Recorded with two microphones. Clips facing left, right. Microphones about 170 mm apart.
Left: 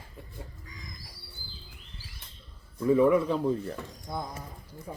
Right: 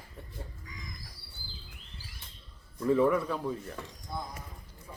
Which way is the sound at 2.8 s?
10° left (ahead or behind).